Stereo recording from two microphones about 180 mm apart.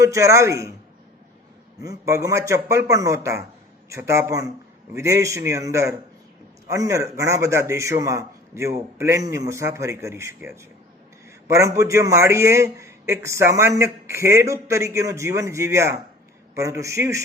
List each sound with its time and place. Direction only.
0.0 s a man's voice: 15° right (ahead or behind)
1.8 s a man's voice: 15° right (ahead or behind)